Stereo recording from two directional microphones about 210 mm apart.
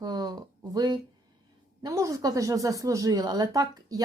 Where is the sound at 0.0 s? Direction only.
20° right (ahead or behind).